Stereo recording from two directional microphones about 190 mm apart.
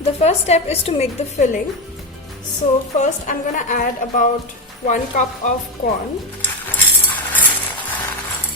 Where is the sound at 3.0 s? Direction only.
45° left (ahead or behind).